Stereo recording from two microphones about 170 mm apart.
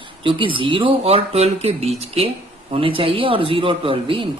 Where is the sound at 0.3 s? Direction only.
30° right (ahead or behind).